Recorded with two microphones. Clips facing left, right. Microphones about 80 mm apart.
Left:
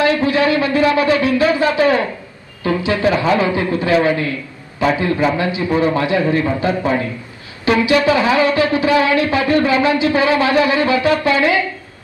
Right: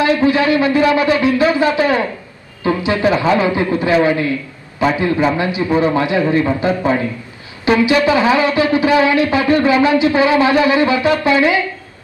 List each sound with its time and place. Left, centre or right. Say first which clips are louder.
0.0 s speech: right 1 dB; right